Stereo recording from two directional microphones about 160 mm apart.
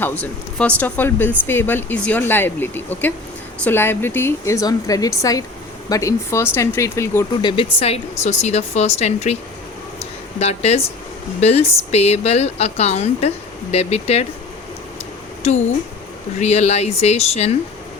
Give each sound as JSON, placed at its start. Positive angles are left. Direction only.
{"t": 0.0, "sound": "speech", "side_deg": 10}
{"t": 7.4, "sound": "speech", "side_deg": 35}
{"t": 10.0, "sound": "a sound", "side_deg": 40}
{"t": 11.3, "sound": "speech", "side_deg": 40}
{"t": 16.4, "sound": "speech", "side_deg": 45}